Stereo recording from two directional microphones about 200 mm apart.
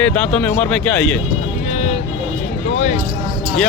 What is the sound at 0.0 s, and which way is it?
Speech, 5° left (ahead or behind).